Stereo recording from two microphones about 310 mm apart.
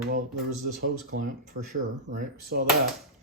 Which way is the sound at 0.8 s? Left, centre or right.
Right.